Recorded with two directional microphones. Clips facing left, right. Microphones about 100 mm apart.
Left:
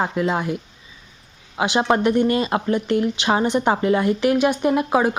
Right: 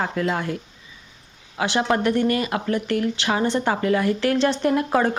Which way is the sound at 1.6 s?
20° left (ahead or behind).